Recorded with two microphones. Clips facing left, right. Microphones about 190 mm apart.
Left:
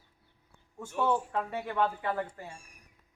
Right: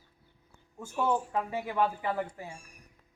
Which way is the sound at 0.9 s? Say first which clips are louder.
Even; 10° right (ahead or behind).